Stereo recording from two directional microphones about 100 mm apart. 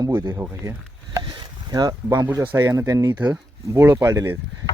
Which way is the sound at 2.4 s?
25° right (ahead or behind).